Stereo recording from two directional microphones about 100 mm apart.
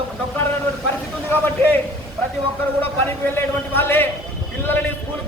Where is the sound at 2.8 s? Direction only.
20° left (ahead or behind).